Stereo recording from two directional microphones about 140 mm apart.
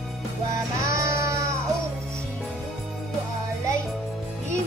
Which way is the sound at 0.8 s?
20° right (ahead or behind).